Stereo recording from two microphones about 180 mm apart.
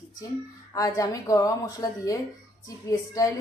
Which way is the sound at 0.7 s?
20° left (ahead or behind).